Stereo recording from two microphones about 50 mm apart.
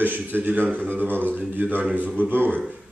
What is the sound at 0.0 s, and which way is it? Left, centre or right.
A man's voice, right.